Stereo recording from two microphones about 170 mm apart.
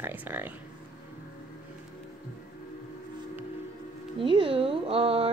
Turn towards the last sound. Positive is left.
turn(degrees=-35)  # may be behind; listen again after turning